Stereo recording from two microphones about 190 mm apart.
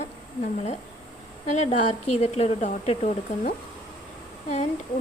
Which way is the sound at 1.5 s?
35° left (ahead or behind).